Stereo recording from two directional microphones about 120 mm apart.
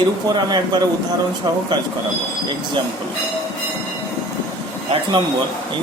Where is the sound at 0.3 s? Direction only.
35° right (ahead or behind).